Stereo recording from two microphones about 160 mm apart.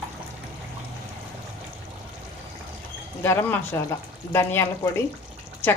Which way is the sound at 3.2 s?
15° left (ahead or behind).